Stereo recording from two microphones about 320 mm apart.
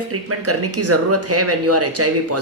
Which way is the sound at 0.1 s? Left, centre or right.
Right.